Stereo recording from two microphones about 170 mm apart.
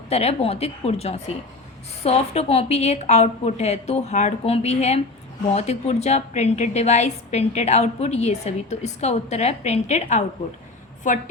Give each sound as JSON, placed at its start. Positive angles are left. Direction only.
{"t": 0.1, "sound": "a woman's voice", "side_deg": 40}